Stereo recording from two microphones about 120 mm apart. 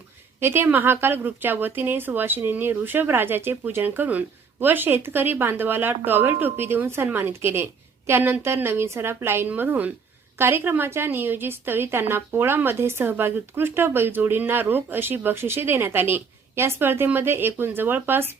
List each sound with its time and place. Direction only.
0.3 s a woman's voice: 20° right (ahead or behind)